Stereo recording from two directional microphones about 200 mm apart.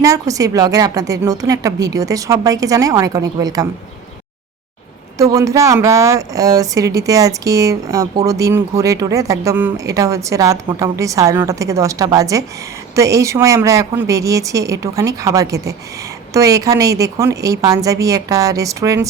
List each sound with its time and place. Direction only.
0.0 s a woman's voice: 15° right (ahead or behind)
5.1 s a woman's voice: 15° right (ahead or behind)